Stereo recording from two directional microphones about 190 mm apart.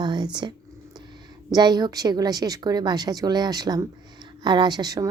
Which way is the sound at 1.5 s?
20° right (ahead or behind).